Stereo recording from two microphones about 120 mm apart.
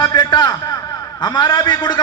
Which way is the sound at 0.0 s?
35° left (ahead or behind).